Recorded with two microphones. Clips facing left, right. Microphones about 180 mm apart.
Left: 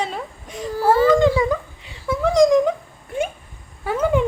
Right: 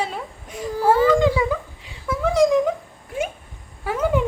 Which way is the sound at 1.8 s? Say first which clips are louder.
Left 3 dB; centre (ahead or behind).